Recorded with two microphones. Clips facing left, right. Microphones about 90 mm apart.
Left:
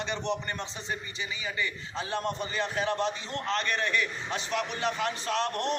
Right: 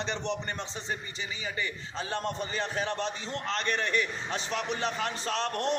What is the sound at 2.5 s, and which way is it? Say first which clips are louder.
A man's voice: left 4 dB; 35° right (ahead or behind).